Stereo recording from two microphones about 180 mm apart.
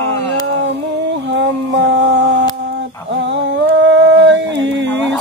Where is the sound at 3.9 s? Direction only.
85° right.